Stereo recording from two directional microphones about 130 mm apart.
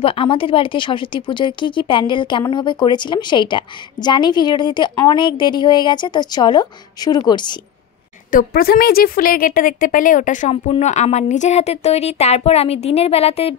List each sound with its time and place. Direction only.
0.0 s a woman's voice: 40° left (ahead or behind)
8.3 s a woman's voice: 90° left
10.8 s a woman's voice: 60° left (ahead or behind)